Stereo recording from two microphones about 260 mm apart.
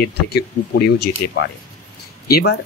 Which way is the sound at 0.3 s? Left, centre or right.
Left.